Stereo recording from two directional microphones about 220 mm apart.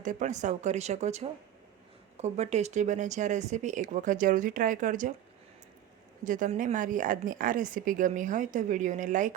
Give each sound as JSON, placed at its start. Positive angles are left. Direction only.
{"t": 0.0, "sound": "a woman's voice", "side_deg": -35}
{"t": 6.2, "sound": "a woman's voice", "side_deg": -35}